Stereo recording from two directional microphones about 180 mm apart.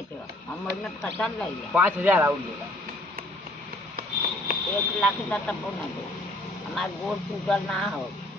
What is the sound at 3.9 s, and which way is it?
Sniff, 55° right (ahead or behind).